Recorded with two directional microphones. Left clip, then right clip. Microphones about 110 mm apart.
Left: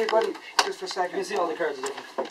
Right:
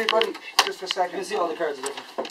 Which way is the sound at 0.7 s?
5° right (ahead or behind).